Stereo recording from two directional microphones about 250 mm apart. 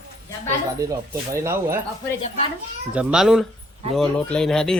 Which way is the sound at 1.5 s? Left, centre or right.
Centre.